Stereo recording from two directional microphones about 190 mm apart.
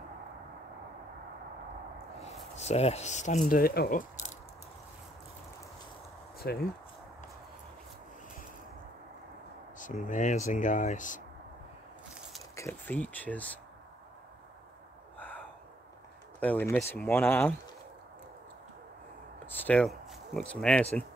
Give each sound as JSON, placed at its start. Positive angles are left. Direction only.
{"t": 2.5, "sound": "speech", "side_deg": 35}
{"t": 3.4, "sound": "speech", "side_deg": 50}
{"t": 6.4, "sound": "speech", "side_deg": 55}
{"t": 9.8, "sound": "speech", "side_deg": 45}
{"t": 12.5, "sound": "speech", "side_deg": 10}
{"t": 15.1, "sound": "a sound", "side_deg": 10}
{"t": 16.3, "sound": "speech", "side_deg": 10}
{"t": 19.4, "sound": "a sound", "side_deg": 10}